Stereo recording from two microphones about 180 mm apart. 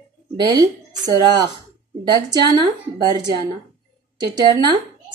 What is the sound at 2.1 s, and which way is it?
Speech, 25° right (ahead or behind).